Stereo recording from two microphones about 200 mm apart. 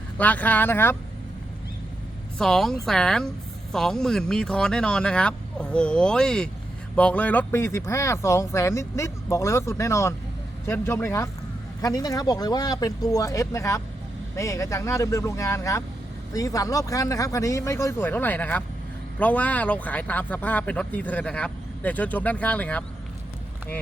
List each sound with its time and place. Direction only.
0.2 s speech: 10° left (ahead or behind)
2.4 s a woman's voice: centre (ahead or behind)